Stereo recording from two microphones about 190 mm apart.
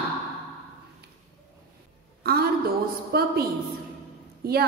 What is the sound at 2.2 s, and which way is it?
A woman's voice, 55° right (ahead or behind).